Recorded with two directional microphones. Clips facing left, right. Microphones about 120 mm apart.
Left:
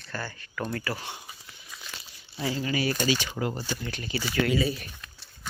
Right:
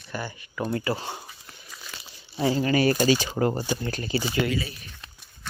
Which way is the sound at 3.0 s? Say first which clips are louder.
Right 6 dB; 40° right (ahead or behind).